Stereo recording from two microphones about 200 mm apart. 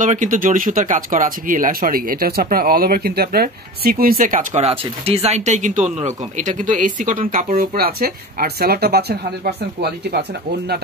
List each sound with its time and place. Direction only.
0.0 s speech: 40° right (ahead or behind)